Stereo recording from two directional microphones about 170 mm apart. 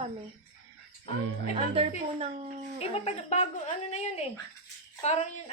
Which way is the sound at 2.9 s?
40° left (ahead or behind).